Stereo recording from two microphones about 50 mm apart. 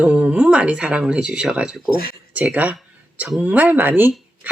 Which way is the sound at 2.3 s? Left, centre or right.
Right.